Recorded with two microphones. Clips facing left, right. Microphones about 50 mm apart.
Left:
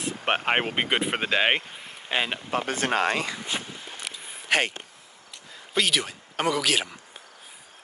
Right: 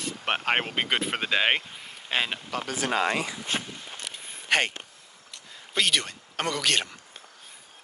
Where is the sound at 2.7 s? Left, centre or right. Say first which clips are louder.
Even; left.